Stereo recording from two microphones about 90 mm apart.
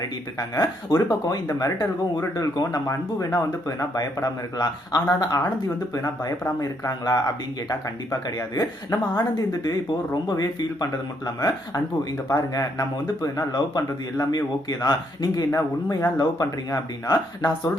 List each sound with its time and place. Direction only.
0.6 s speech: 45° left (ahead or behind)